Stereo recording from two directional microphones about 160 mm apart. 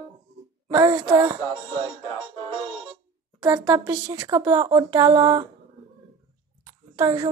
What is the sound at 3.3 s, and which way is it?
Speech, 25° right (ahead or behind).